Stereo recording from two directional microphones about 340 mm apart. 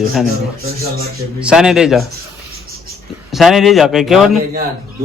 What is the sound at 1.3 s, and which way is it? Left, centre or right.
Speech, centre.